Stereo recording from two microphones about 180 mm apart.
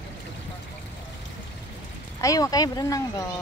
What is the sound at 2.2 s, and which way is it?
Speech, 20° left (ahead or behind).